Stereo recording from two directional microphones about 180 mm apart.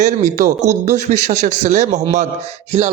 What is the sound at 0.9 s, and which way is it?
A man's voice, 40° right (ahead or behind).